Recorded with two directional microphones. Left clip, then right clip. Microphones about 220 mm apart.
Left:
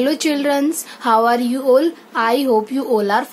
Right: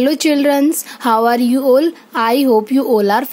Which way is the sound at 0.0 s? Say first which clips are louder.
Right 4 dB; 45° right (ahead or behind).